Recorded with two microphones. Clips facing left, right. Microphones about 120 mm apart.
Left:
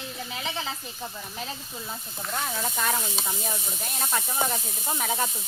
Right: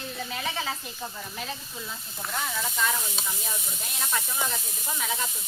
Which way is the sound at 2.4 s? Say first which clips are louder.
Even; 30° left (ahead or behind).